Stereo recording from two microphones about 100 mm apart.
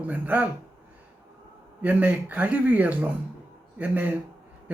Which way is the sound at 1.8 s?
15° right (ahead or behind).